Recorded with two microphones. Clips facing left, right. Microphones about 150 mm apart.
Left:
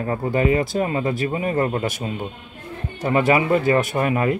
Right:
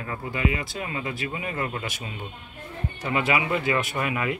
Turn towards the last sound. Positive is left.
turn(degrees=40)  # may be behind; listen again after turning